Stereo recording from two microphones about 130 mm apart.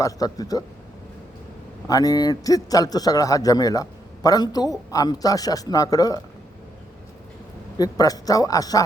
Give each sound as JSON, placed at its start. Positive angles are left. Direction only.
{"t": 0.0, "sound": "a man's voice", "side_deg": 30}
{"t": 1.9, "sound": "a man's voice", "side_deg": 30}
{"t": 7.8, "sound": "a man's voice", "side_deg": 30}